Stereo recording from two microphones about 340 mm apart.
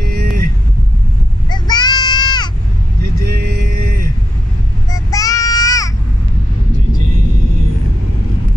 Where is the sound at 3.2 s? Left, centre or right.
Right.